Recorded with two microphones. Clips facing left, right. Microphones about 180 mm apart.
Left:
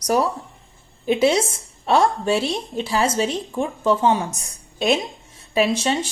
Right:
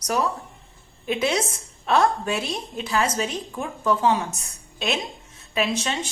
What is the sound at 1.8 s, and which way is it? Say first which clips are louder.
A woman's voice: left 3 dB; 30° left (ahead or behind).